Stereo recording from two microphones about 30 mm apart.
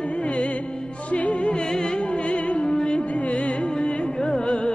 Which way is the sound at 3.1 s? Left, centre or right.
Left.